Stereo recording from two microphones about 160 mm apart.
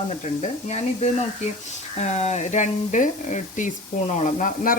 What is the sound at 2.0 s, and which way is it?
Speech, 45° left (ahead or behind).